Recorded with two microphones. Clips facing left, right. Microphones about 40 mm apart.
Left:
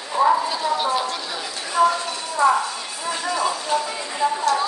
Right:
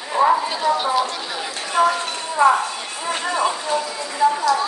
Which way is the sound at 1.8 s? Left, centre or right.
Right.